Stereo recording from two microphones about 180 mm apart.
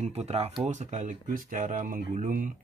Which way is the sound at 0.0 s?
35° right (ahead or behind).